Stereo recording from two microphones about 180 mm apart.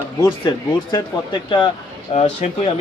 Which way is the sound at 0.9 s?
25° left (ahead or behind).